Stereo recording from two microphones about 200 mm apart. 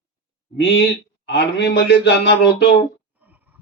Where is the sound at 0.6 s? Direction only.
55° left (ahead or behind).